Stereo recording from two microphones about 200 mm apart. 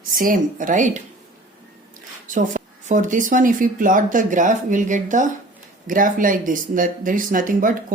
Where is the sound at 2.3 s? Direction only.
40° right (ahead or behind).